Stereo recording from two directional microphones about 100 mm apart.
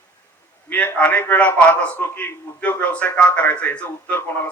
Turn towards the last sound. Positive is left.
turn(degrees=15)  # may be behind; listen again after turning